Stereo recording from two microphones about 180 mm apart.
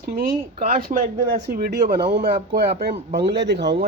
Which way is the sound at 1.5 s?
60° right (ahead or behind).